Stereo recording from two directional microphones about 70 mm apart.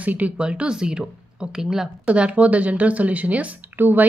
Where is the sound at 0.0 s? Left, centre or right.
Right.